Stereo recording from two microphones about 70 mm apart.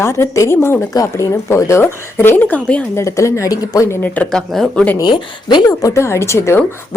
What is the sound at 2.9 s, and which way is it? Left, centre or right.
Speech, left.